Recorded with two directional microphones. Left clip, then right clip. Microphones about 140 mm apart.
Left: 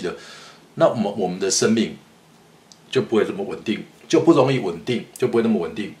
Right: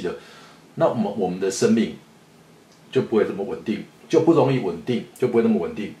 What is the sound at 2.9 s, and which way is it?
Speech, 35° left (ahead or behind).